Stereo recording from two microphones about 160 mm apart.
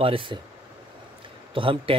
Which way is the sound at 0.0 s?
35° right (ahead or behind).